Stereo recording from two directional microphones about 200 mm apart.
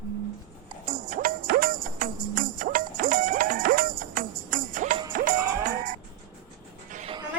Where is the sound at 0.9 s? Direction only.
40° right (ahead or behind).